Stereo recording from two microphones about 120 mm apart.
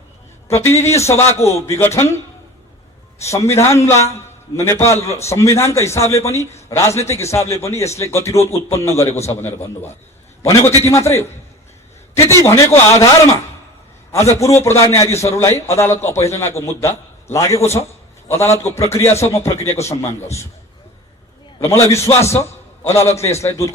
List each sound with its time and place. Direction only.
0.4 s a man's voice: 25° left (ahead or behind)
3.2 s a man's voice: 25° left (ahead or behind)
14.3 s a man's voice: 25° left (ahead or behind)
19.9 s a man's voice: 65° left (ahead or behind)
21.6 s a man's voice: 25° left (ahead or behind)